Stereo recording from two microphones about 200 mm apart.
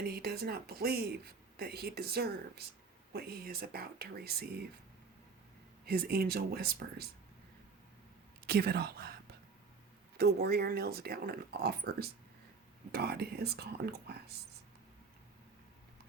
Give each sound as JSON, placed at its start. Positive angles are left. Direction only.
{"t": 0.0, "sound": "speech", "side_deg": -50}
{"t": 5.8, "sound": "speech", "side_deg": -50}
{"t": 8.4, "sound": "speech", "side_deg": -50}
{"t": 10.2, "sound": "speech", "side_deg": -55}